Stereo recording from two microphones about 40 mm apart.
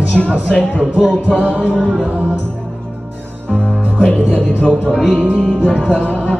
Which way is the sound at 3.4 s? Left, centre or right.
Left.